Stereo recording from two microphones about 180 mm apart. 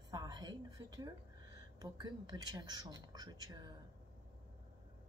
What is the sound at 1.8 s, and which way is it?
Speech, 20° right (ahead or behind).